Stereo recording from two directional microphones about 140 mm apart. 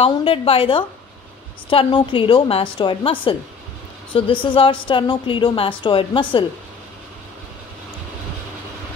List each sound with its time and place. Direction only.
0.0 s a woman's voice: 40° left (ahead or behind)